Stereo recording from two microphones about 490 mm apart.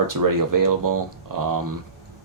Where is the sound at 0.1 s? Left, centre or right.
Right.